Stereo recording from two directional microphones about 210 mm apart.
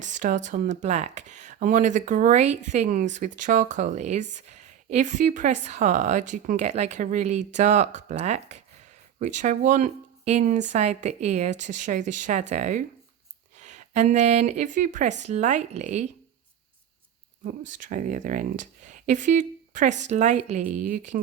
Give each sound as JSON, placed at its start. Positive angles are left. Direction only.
{"t": 0.0, "sound": "speech", "side_deg": -40}
{"t": 17.4, "sound": "speech", "side_deg": -40}